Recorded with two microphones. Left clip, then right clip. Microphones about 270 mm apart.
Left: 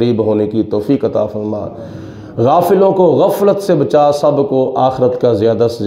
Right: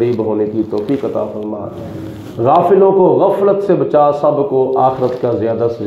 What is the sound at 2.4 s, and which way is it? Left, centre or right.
Speech, left.